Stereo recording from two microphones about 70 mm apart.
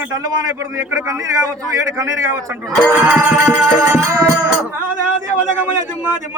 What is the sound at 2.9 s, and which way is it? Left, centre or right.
Music, centre.